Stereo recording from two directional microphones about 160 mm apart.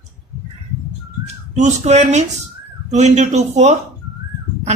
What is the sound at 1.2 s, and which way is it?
A man's voice, 45° right (ahead or behind).